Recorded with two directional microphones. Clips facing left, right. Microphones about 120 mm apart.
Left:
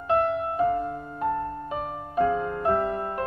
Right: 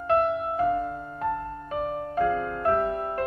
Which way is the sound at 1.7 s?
20° left (ahead or behind).